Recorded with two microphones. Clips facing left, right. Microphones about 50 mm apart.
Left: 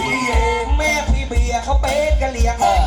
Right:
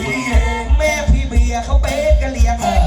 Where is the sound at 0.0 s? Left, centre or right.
Left.